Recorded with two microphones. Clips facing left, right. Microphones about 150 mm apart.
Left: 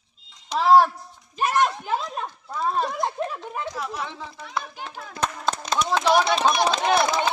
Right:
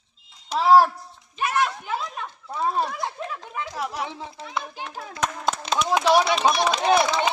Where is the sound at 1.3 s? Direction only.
35° left (ahead or behind).